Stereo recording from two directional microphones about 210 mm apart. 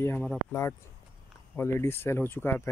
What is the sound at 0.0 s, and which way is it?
Speech, 5° left (ahead or behind).